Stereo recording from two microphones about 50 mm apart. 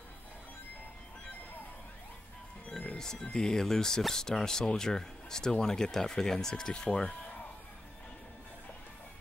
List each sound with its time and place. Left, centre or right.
2.7 s music: left
3.0 s speech: centre